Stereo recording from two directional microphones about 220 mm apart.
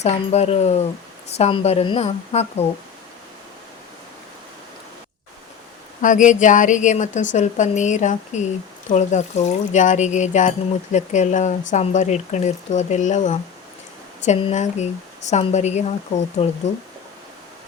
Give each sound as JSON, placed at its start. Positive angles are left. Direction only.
{"t": 0.0, "sound": "a woman's voice", "side_deg": 30}
{"t": 6.0, "sound": "speech", "side_deg": 35}